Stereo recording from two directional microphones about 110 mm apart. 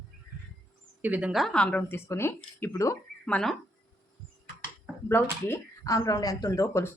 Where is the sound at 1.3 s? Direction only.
5° left (ahead or behind); by 3.0 s 30° left (ahead or behind).